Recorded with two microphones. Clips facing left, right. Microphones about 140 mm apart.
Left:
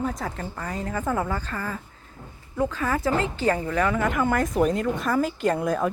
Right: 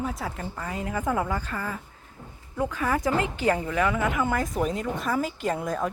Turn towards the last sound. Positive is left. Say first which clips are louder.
# left 4 dB
turn(degrees=0)  # may be behind; listen again after turning